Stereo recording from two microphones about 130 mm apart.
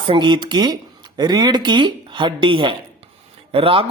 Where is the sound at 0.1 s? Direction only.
35° right (ahead or behind).